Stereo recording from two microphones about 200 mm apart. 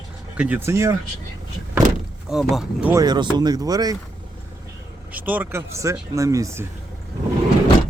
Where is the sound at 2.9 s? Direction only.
20° right (ahead or behind).